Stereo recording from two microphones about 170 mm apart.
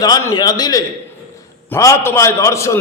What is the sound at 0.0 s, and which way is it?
A man's voice, 20° left (ahead or behind).